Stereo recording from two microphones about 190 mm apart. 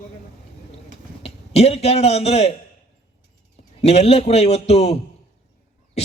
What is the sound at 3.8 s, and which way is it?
A man's voice, 35° left (ahead or behind).